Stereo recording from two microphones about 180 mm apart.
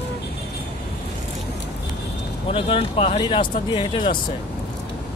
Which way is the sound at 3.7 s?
25° left (ahead or behind).